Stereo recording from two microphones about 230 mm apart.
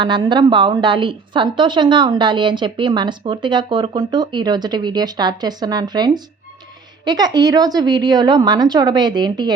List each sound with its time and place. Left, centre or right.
0.0 s a woman's voice: centre